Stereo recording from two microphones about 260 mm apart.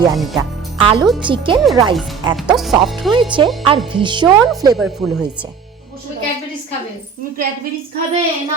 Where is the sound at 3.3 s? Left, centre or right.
Centre.